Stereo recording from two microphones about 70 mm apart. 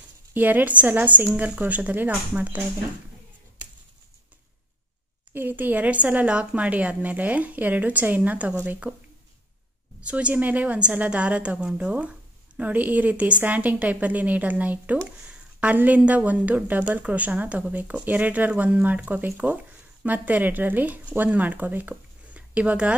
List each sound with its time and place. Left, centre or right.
0.3 s a woman's voice: right
5.3 s a woman's voice: right
10.0 s a woman's voice: centre
15.2 s a sound: right
16.0 s a woman's voice: centre